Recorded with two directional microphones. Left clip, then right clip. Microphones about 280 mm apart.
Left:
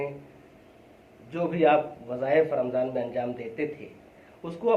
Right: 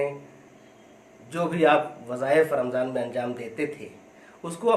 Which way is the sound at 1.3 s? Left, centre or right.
Right.